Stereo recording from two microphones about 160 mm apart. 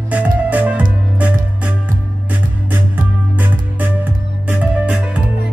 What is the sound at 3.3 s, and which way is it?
Music, 10° right (ahead or behind).